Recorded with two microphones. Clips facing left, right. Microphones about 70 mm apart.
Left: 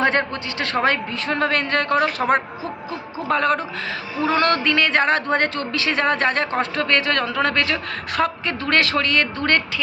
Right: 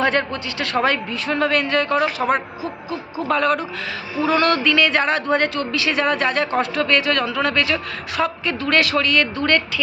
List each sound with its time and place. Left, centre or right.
0.0 s speech: left
3.2 s speech: left